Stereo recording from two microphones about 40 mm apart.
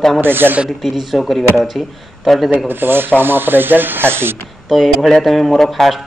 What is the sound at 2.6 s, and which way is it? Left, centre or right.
Rub, right.